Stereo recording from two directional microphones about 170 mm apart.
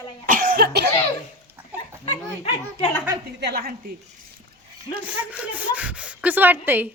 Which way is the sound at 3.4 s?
65° right (ahead or behind).